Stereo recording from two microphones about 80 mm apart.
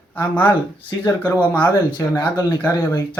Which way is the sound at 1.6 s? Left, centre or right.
Left.